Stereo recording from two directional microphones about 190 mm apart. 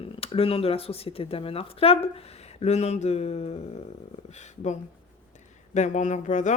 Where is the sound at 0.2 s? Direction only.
30° left (ahead or behind).